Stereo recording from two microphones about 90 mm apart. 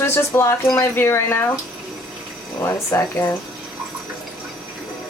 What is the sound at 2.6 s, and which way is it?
Speech, 30° left (ahead or behind).